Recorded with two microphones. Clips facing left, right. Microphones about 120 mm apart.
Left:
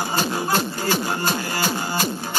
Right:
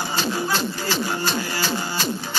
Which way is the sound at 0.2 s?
50° left (ahead or behind).